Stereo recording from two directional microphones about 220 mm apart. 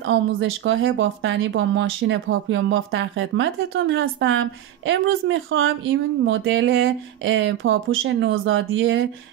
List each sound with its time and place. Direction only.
0.0 s speech: 60° right (ahead or behind)